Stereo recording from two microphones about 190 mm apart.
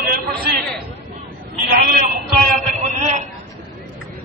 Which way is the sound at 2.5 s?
40° right (ahead or behind).